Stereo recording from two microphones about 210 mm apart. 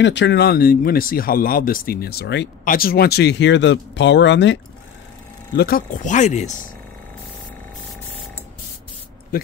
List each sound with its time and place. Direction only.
0.0 s speech: 55° left (ahead or behind)
5.6 s speech: 45° left (ahead or behind)
9.3 s speech: 45° left (ahead or behind)